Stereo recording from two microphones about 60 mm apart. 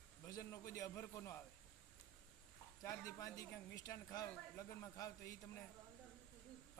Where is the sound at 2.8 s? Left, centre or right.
Left.